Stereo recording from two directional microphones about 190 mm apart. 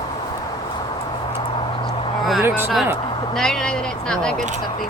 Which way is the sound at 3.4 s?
5° left (ahead or behind).